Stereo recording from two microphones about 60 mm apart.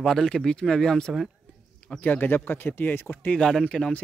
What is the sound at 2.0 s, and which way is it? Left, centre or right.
Speech, left.